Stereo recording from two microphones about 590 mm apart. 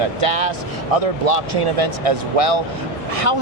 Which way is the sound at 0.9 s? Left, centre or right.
Right.